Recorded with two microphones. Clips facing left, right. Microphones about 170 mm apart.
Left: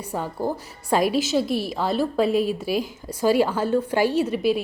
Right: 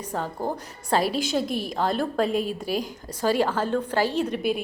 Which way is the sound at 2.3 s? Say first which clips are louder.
Left 4 dB; 45° right (ahead or behind).